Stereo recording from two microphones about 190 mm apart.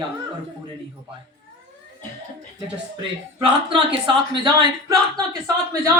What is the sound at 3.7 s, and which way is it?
Speech, 25° right (ahead or behind).